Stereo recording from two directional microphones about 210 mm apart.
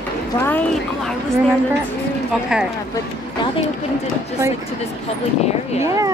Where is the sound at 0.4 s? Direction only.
10° left (ahead or behind).